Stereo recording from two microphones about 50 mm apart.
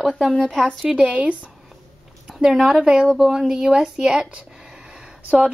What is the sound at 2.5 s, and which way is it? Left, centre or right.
A woman's voice, centre.